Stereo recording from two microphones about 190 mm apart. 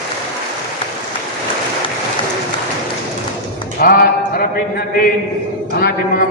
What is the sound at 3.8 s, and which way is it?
Speech, 50° left (ahead or behind).